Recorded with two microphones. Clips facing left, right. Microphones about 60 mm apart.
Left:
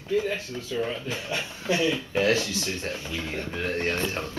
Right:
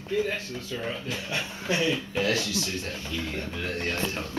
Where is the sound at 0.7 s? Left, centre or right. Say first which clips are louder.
Left 4 dB; centre.